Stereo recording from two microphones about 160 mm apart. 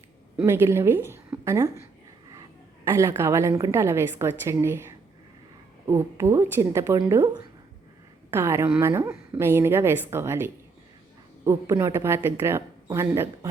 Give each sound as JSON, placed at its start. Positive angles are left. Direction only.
{"t": 0.4, "sound": "a woman's voice", "side_deg": -15}
{"t": 8.3, "sound": "a woman's voice", "side_deg": -15}